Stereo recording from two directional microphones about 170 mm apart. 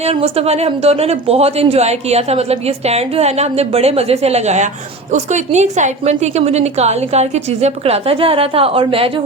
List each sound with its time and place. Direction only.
0.0 s a woman's voice: 35° right (ahead or behind)